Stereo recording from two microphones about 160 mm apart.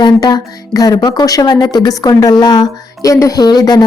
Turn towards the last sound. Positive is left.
turn(degrees=25)  # may be behind; listen again after turning